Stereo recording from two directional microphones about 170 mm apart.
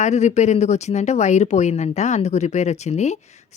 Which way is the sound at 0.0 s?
45° left (ahead or behind).